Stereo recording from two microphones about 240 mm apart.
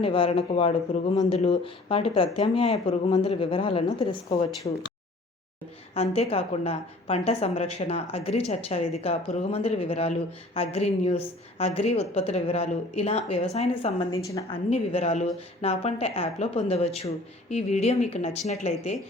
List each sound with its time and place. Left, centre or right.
0.0 s a woman's voice: left
5.9 s a woman's voice: left
14.3 s a woman's voice: centre
14.7 s a woman's voice: left